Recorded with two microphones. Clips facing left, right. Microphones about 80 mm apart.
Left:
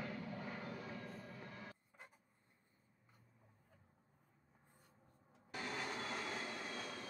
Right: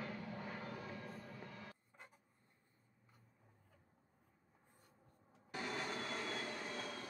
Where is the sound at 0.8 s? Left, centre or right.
Centre.